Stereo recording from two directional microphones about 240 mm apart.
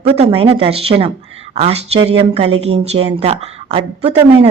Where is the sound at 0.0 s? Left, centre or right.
Right.